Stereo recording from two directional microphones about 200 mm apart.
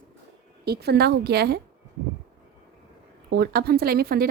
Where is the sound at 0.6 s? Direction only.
55° right (ahead or behind).